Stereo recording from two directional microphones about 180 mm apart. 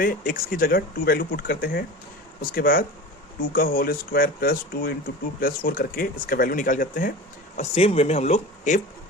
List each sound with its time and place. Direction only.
0.0 s speech: 50° left (ahead or behind)
7.5 s speech: 35° left (ahead or behind)